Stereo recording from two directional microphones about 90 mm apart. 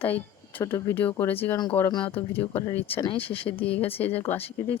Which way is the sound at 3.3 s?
75° left (ahead or behind).